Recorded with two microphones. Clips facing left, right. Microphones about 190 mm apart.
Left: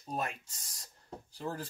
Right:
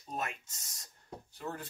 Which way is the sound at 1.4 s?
30° left (ahead or behind).